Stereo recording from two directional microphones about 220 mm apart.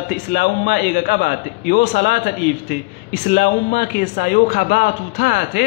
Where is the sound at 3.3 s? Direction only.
45° left (ahead or behind).